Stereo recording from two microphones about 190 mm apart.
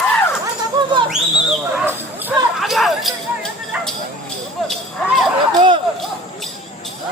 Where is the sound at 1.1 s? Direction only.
5° right (ahead or behind).